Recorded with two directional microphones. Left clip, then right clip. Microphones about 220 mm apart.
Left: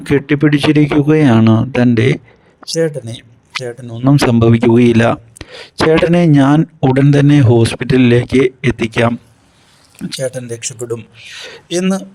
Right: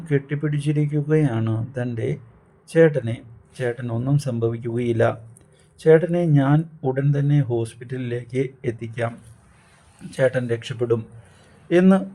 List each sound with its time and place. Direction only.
0.0 s speech: 40° left (ahead or behind)
2.7 s speech: centre (ahead or behind)
4.0 s speech: 40° left (ahead or behind)
10.2 s speech: centre (ahead or behind)